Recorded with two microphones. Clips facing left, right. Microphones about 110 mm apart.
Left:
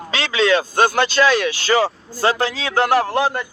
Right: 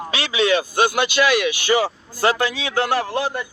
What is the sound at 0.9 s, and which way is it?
Speech, 15° right (ahead or behind).